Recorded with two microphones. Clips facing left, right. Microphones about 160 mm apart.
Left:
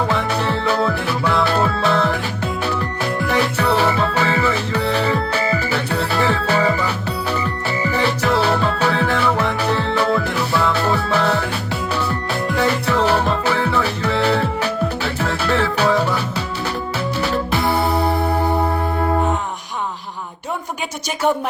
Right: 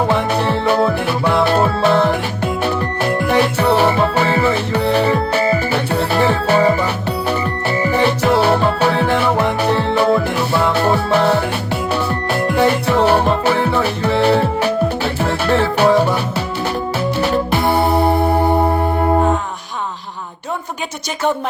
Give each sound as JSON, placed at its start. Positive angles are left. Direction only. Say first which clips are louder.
{"t": 0.0, "sound": "music", "louder": "right 4 dB", "side_deg": -30}